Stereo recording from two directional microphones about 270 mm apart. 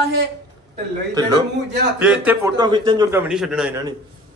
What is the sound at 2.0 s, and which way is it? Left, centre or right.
A man's voice, centre.